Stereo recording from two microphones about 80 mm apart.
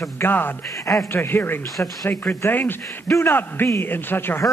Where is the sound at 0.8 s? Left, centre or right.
Left.